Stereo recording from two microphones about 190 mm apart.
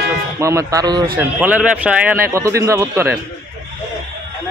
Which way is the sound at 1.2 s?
10° right (ahead or behind).